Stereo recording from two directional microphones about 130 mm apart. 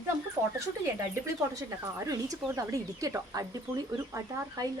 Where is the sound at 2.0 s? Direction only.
30° right (ahead or behind).